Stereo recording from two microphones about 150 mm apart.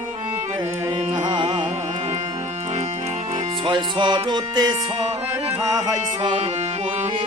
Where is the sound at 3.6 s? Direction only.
30° right (ahead or behind).